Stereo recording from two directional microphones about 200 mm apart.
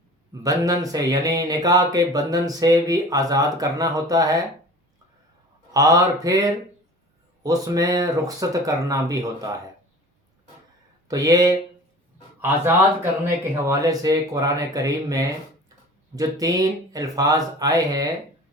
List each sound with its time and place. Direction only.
0.4 s speech: 15° right (ahead or behind)
5.7 s speech: 15° right (ahead or behind)
11.1 s speech: 20° right (ahead or behind)